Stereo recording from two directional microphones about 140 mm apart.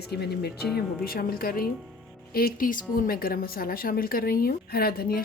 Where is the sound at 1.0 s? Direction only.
90° left.